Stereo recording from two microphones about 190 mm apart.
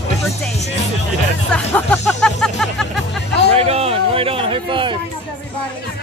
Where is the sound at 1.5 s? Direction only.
5° left (ahead or behind).